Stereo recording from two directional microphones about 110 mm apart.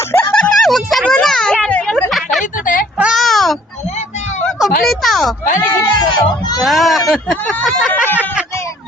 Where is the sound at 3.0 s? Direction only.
5° right (ahead or behind).